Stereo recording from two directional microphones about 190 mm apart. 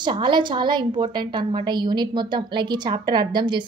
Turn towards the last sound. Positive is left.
turn(degrees=-25)  # may be behind; listen again after turning